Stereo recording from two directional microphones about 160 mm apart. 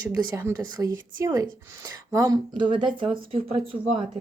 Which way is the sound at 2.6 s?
35° right (ahead or behind).